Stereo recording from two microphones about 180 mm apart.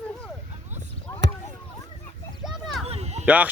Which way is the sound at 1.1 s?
15° left (ahead or behind).